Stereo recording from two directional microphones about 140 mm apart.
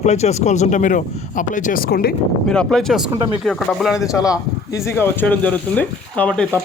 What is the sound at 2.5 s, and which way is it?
Speech, 5° left (ahead or behind).